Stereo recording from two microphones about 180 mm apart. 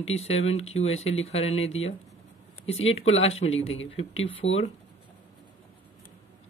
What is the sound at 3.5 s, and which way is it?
A man's voice, 90° left.